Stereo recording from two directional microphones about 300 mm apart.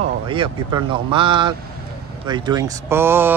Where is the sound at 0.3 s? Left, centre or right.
Centre.